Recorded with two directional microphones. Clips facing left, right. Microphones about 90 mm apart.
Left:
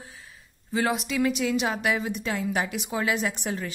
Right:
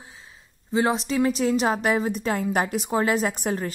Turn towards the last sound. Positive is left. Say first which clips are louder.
# right 4 dB
turn(degrees=-45)  # may be behind; listen again after turning